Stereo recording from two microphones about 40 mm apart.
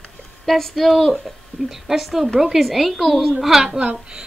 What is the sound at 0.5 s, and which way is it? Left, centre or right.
A woman's voice, centre.